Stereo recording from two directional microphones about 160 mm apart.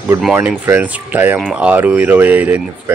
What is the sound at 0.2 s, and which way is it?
Speech, 10° right (ahead or behind).